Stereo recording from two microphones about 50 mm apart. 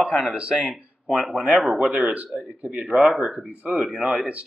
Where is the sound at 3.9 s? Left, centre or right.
Centre.